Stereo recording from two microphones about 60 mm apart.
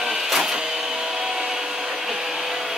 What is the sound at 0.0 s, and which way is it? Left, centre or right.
Printer, centre.